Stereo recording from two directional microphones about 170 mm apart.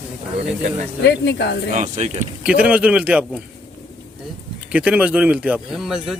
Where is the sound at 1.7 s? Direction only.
45° right (ahead or behind).